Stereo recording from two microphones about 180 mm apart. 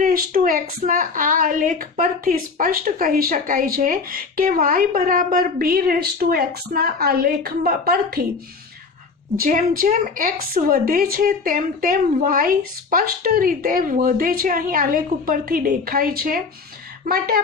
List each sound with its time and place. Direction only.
0.0 s a woman's voice: 50° right (ahead or behind)
9.4 s a woman's voice: 50° right (ahead or behind)